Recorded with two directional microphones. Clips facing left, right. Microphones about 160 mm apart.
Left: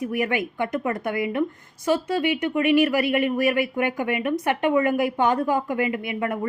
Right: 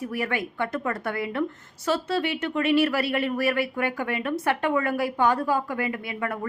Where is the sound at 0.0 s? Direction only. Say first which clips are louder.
Left 4 dB; 15° left (ahead or behind).